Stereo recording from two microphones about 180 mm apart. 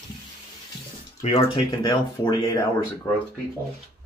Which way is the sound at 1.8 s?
25° left (ahead or behind).